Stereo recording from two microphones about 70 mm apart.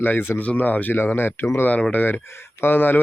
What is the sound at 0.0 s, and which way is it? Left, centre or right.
Speech, left.